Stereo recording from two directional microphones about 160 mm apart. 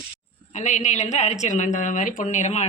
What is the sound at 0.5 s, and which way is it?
Speech, 50° left (ahead or behind).